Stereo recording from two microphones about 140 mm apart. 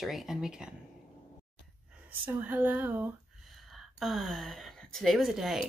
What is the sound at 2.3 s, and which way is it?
Speech, 15° right (ahead or behind).